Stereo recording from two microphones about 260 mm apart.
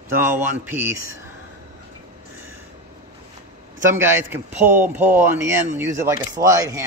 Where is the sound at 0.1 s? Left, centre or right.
Centre.